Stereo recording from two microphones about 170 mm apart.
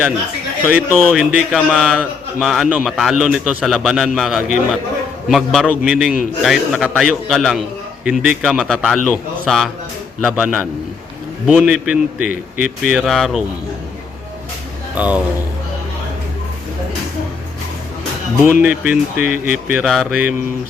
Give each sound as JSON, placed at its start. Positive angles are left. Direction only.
{"t": 0.7, "sound": "a man's voice", "side_deg": -5}
{"t": 14.9, "sound": "a man's voice", "side_deg": -10}
{"t": 18.6, "sound": "a man's voice", "side_deg": -5}